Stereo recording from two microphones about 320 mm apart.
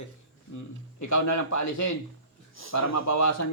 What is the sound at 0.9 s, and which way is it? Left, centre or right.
Speech, left.